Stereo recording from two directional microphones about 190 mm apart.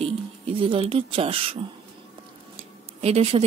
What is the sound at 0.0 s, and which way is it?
Speech, 30° right (ahead or behind).